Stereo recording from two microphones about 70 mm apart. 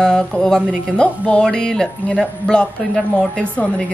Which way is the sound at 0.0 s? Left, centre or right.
Centre.